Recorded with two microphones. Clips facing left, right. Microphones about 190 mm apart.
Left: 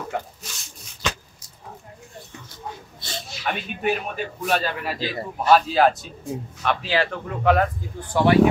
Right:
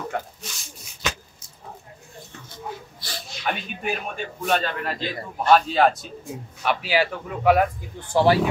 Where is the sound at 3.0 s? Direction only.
25° left (ahead or behind).